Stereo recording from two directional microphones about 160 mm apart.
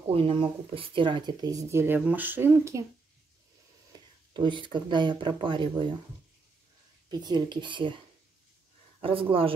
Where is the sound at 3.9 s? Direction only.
30° right (ahead or behind).